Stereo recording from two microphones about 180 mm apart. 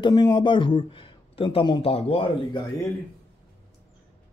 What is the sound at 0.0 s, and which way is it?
A man's voice, 20° left (ahead or behind).